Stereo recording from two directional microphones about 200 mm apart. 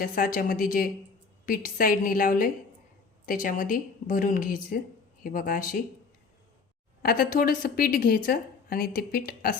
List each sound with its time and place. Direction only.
0.0 s a woman's voice: 45° left (ahead or behind)
7.0 s a woman's voice: 50° left (ahead or behind)